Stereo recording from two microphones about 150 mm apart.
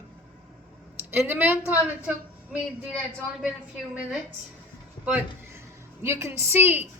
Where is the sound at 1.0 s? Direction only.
10° right (ahead or behind).